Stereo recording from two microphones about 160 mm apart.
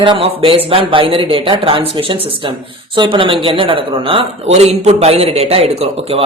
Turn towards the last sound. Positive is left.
turn(degrees=-40)  # may be behind; listen again after turning